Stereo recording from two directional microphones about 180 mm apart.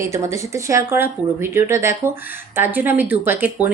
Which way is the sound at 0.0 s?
15° right (ahead or behind).